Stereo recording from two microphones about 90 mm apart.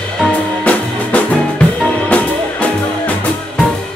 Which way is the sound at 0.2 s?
15° left (ahead or behind).